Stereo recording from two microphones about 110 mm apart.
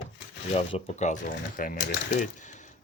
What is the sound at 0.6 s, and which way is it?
Speech, 80° left.